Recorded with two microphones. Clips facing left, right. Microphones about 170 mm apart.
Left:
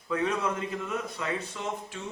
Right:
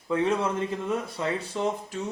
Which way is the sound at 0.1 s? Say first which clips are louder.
Right 4 dB; 30° right (ahead or behind).